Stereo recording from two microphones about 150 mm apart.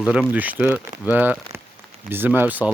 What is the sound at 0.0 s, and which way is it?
Speech, 5° right (ahead or behind).